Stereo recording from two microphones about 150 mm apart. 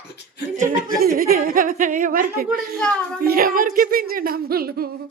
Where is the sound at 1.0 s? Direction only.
80° right.